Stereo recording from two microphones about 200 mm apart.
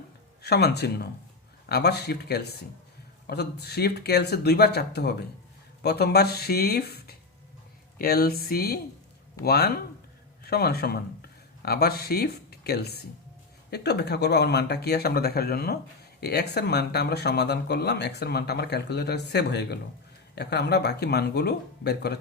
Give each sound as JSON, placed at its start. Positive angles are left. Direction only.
{"t": 0.4, "sound": "speech", "side_deg": 55}